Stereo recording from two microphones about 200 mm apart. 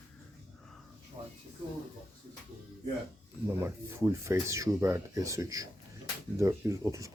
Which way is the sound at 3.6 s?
10° right (ahead or behind).